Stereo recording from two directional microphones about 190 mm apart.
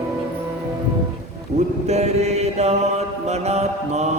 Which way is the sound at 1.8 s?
35° right (ahead or behind).